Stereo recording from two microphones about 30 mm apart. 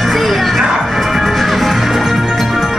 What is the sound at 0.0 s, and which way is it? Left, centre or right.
Music, centre.